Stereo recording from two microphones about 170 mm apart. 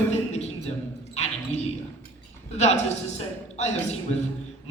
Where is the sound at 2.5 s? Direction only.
40° left (ahead or behind).